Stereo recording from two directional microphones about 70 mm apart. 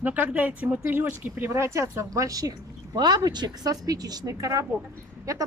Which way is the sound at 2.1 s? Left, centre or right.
Right.